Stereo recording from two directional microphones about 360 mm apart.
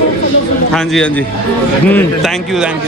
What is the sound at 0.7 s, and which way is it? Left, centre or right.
A man's voice, centre.